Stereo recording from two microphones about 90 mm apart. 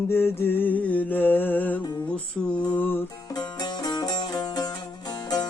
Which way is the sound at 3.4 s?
50° left (ahead or behind).